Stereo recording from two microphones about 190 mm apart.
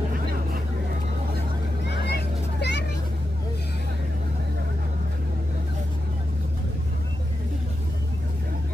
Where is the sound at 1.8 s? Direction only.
65° left (ahead or behind).